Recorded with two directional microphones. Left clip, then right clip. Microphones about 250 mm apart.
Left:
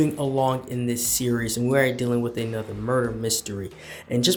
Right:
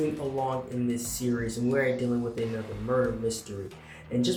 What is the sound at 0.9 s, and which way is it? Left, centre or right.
Speech, left.